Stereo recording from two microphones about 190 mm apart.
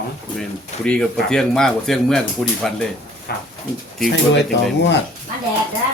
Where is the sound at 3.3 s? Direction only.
55° left (ahead or behind).